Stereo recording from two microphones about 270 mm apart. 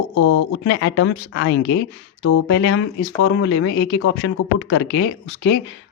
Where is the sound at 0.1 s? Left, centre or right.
Left.